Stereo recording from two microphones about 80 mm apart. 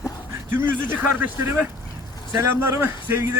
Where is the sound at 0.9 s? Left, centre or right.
Right.